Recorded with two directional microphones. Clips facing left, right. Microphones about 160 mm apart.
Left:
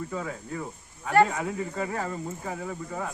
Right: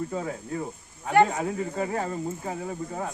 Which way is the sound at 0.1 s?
30° right (ahead or behind).